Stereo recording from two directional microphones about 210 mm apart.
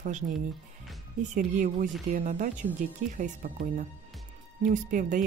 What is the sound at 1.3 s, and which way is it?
Speech, 40° right (ahead or behind).